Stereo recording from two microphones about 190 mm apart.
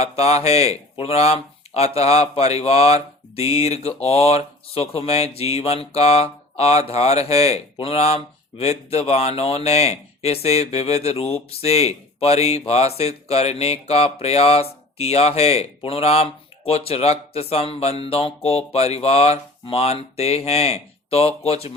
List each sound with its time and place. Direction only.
0.0 s speech: 35° left (ahead or behind)